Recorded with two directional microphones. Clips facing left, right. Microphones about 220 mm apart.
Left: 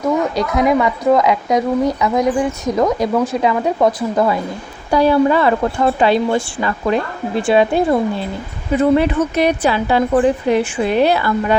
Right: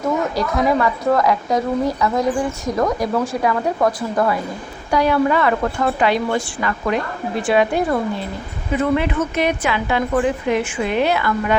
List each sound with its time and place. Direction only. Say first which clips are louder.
0.3 s a woman's voice: left 3 dB; 20° left (ahead or behind)
4.9 s a woman's voice: left 4 dB; 30° left (ahead or behind)